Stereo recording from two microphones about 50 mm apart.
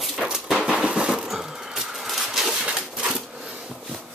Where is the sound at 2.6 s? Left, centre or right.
Right.